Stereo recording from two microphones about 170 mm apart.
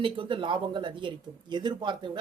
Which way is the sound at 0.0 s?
30° right (ahead or behind).